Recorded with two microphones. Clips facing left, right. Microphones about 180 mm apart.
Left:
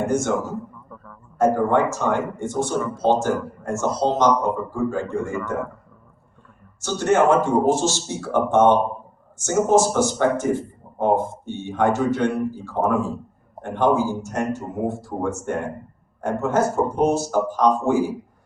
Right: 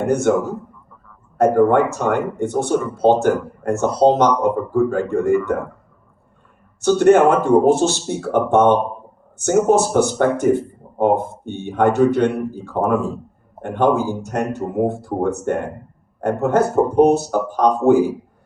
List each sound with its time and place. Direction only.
0.1 s speech: 60° right (ahead or behind)
1.4 s speech: 60° right (ahead or behind)
6.8 s speech: 60° right (ahead or behind)